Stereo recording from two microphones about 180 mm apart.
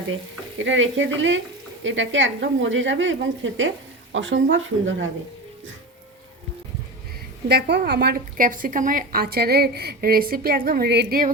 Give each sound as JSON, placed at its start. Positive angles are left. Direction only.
{"t": 0.6, "sound": "a woman's voice", "side_deg": -90}
{"t": 7.4, "sound": "a woman's voice", "side_deg": -65}